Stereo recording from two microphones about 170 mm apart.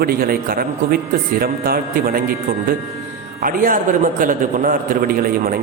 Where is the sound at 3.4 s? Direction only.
55° right (ahead or behind).